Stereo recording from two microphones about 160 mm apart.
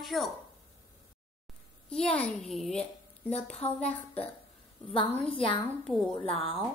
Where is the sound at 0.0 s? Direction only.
Centre (ahead or behind).